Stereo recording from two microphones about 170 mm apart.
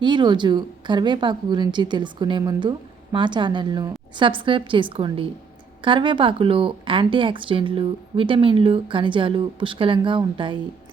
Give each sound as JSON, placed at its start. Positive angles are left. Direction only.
{"t": 0.0, "sound": "a woman's voice", "side_deg": -25}